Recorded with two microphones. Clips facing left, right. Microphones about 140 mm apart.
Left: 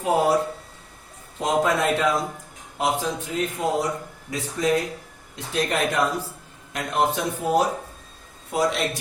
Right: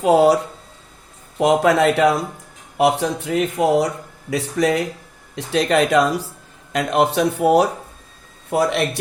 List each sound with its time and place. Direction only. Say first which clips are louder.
0.0 s speech: right 7 dB; 85° right
1.4 s speech: right 7 dB; 80° right